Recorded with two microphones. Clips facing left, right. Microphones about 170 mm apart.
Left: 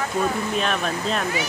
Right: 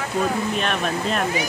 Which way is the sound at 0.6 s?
5° right (ahead or behind).